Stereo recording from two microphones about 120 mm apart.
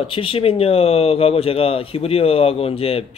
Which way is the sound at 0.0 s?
50° left (ahead or behind).